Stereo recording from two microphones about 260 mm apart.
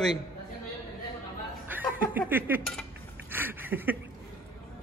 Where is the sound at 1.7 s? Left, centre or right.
Centre.